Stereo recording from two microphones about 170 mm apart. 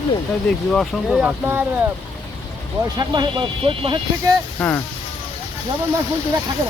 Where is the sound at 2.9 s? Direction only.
25° right (ahead or behind).